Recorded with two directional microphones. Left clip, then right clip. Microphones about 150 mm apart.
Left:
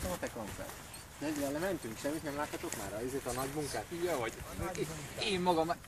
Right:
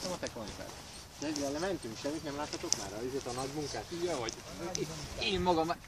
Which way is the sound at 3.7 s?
45° left (ahead or behind).